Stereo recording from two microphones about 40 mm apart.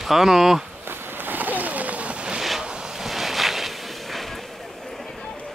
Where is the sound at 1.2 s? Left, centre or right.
Right.